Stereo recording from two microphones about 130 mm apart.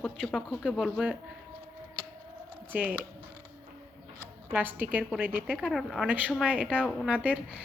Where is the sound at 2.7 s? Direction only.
10° right (ahead or behind).